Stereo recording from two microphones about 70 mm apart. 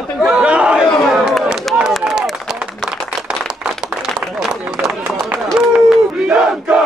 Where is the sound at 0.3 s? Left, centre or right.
Centre.